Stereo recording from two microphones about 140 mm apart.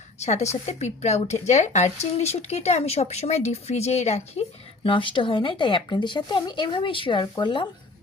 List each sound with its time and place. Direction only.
0.2 s speech: 55° left (ahead or behind); by 7.7 s 35° left (ahead or behind)